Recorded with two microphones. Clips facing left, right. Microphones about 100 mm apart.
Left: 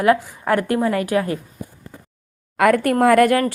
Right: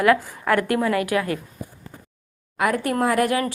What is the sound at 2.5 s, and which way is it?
Speech, 60° left (ahead or behind).